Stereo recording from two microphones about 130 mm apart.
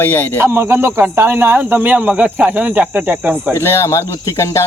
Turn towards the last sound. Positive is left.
turn(degrees=25)  # may be behind; listen again after turning